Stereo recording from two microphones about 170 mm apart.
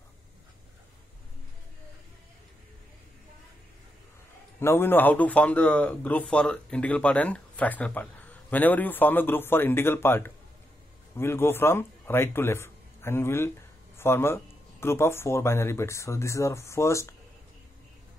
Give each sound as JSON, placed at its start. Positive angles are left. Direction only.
{"t": 4.6, "sound": "a man's voice", "side_deg": 15}